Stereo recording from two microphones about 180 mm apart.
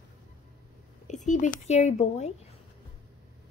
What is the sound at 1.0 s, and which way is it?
Speech, 45° left (ahead or behind).